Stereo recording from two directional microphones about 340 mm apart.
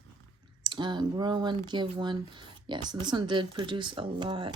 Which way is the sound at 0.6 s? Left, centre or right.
Centre.